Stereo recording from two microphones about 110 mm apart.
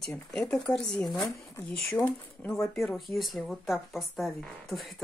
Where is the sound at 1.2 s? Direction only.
35° left (ahead or behind).